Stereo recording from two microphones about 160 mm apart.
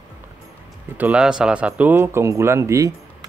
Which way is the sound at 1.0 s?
5° right (ahead or behind).